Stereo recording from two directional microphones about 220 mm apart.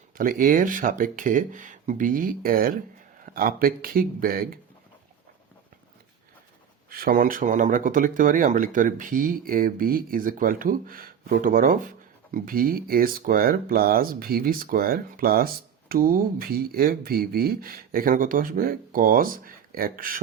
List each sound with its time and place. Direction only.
0.2 s speech: 40° right (ahead or behind)
6.9 s speech: 40° right (ahead or behind)